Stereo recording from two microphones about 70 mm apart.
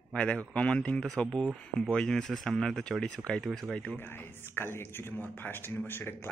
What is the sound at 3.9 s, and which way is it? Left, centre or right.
Speech, left.